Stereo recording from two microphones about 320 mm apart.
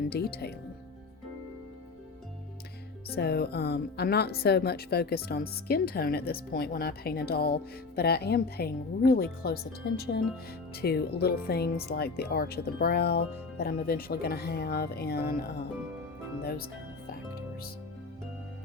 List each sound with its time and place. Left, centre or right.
0.1 s speech: left
3.2 s speech: left